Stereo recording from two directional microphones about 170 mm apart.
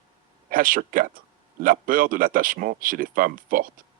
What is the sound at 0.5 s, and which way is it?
Speech, 55° right (ahead or behind).